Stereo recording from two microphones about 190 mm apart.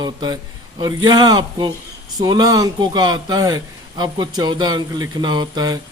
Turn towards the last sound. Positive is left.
turn(degrees=-20)  # may be behind; listen again after turning